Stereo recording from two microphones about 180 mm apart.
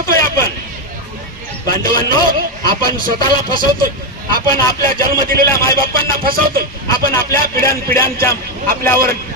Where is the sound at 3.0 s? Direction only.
50° right (ahead or behind).